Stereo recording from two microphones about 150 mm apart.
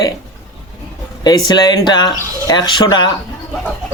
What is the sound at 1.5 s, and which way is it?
A man's voice, 25° left (ahead or behind).